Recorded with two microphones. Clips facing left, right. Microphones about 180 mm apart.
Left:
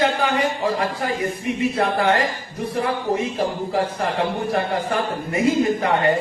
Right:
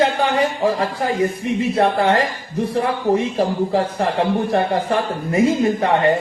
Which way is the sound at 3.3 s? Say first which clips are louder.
Right 4 dB; 30° right (ahead or behind).